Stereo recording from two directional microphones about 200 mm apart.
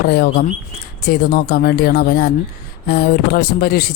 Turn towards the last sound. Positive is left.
turn(degrees=50)  # may be behind; listen again after turning